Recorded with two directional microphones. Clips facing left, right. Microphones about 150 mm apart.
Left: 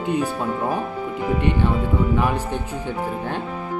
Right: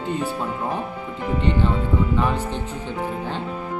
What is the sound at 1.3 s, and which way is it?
Speech, 15° left (ahead or behind).